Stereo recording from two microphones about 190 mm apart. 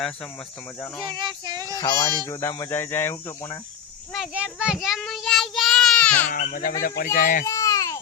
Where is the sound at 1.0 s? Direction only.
25° right (ahead or behind).